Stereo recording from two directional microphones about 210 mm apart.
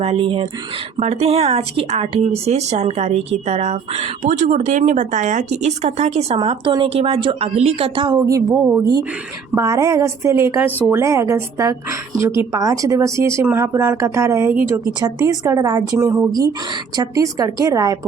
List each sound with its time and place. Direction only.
0.0 s a woman's voice: 25° right (ahead or behind)